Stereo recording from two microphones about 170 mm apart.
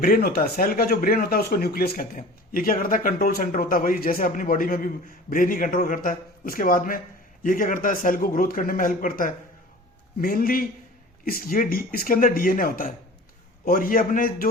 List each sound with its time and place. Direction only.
0.0 s speech: 60° left (ahead or behind)